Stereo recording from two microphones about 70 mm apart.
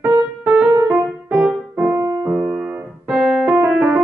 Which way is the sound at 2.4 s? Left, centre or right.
Centre.